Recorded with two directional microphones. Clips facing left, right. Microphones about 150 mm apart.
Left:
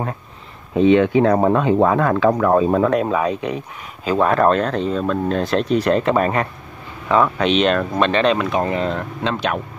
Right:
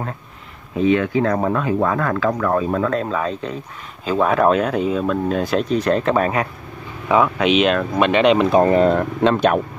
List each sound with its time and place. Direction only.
0.7 s speech: 25° left (ahead or behind)
4.0 s speech: centre (ahead or behind); by 8.5 s 15° right (ahead or behind)
8.5 s speech: 40° right (ahead or behind)